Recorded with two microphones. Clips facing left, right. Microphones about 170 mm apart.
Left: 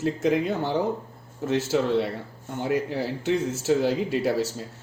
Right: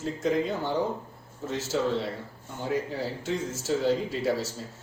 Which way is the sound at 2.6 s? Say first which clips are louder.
Left 3 dB; 70° left (ahead or behind).